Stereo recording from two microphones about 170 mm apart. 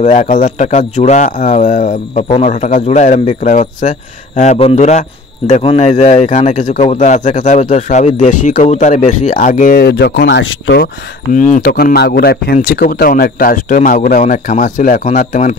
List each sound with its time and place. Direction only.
0.0 s speech: 45° left (ahead or behind)
9.8 s speech: 75° left (ahead or behind)
11.3 s speech: 50° left (ahead or behind); by 12.5 s 65° left (ahead or behind)
12.5 s speech: 55° left (ahead or behind)